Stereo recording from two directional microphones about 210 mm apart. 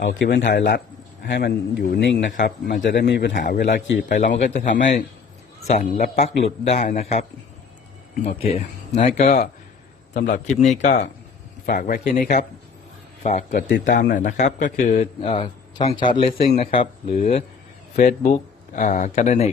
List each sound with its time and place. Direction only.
0.0 s a man's voice: 60° left (ahead or behind)
2.3 s a man's voice: 40° left (ahead or behind)
4.4 s a man's voice: 35° left (ahead or behind)
8.4 s speech: 40° left (ahead or behind)
9.0 s a man's voice: 30° left (ahead or behind)
13.5 s a man's voice: 50° left (ahead or behind); by 19.5 s 35° left (ahead or behind)